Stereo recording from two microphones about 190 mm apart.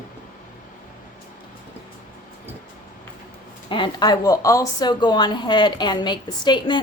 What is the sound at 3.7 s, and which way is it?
A woman's voice, 25° left (ahead or behind).